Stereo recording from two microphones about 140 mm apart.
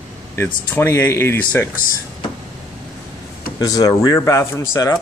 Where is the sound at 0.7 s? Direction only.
15° left (ahead or behind).